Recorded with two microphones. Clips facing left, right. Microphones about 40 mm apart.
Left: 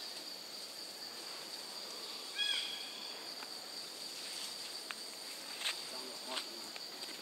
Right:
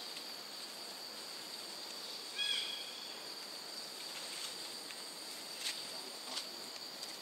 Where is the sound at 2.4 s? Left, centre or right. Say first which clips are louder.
Left 1 dB; centre.